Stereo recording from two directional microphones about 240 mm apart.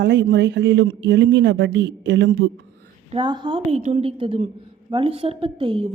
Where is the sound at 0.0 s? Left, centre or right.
Right.